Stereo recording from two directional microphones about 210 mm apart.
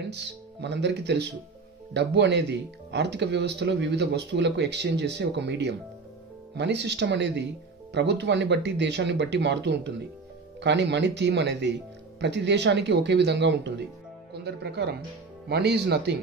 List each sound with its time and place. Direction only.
0.0 s speech: 55° right (ahead or behind)